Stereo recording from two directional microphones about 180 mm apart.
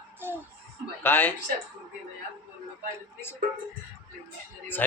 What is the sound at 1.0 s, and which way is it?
Speech, 10° left (ahead or behind).